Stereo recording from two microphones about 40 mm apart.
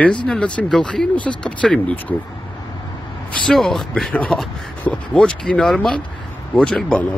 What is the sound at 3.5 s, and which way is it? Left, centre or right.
Speech, centre.